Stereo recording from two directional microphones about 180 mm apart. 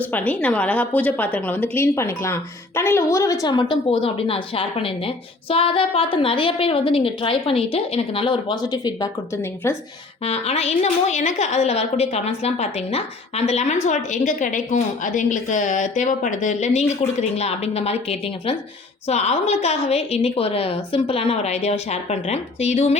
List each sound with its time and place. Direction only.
0.1 s a woman's voice: 10° left (ahead or behind)
10.2 s a woman's voice: 35° left (ahead or behind)